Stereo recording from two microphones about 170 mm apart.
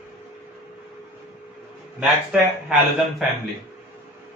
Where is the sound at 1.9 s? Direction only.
5° right (ahead or behind).